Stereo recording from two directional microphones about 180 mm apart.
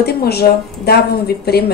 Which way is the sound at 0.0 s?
60° left (ahead or behind).